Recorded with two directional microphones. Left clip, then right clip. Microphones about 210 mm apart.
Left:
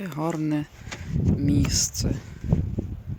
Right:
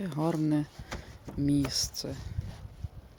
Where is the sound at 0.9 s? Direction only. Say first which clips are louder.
Left 12 dB; 50° right (ahead or behind).